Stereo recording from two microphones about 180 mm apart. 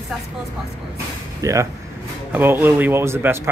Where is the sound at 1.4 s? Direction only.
15° right (ahead or behind).